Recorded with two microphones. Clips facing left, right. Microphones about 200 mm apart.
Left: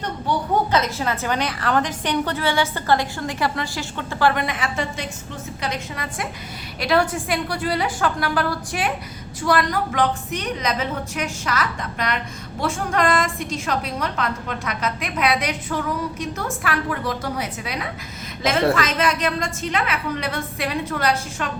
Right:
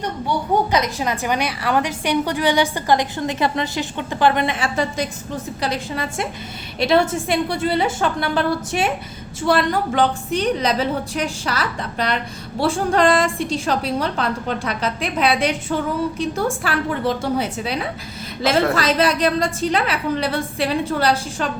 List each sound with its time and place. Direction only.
0.7 s a woman's voice: 15° right (ahead or behind); by 21.5 s 30° right (ahead or behind)